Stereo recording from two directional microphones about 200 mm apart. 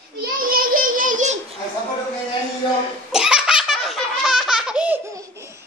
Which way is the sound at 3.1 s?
5° right (ahead or behind).